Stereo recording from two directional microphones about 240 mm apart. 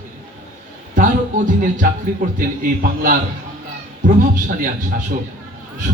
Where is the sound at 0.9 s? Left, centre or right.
Right.